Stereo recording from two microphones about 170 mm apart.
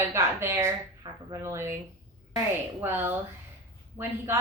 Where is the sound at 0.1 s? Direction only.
15° right (ahead or behind).